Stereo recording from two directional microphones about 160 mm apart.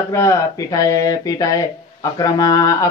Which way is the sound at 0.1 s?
20° left (ahead or behind).